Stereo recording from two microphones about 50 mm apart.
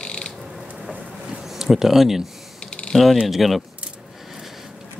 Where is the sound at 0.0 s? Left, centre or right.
Centre.